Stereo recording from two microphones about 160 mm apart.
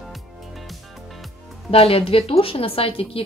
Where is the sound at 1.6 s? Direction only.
40° left (ahead or behind).